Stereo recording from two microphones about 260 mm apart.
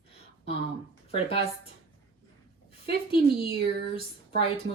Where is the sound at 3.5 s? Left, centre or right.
Right.